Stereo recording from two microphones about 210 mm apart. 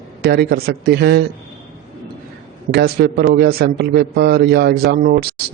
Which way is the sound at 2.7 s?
50° right (ahead or behind).